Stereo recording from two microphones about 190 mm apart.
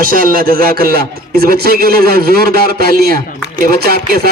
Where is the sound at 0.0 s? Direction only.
50° right (ahead or behind).